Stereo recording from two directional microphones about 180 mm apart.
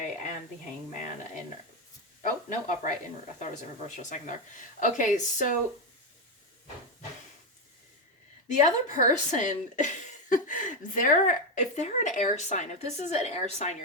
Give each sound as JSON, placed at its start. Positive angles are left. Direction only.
{"t": 2.2, "sound": "speech", "side_deg": 45}
{"t": 8.4, "sound": "speech", "side_deg": 45}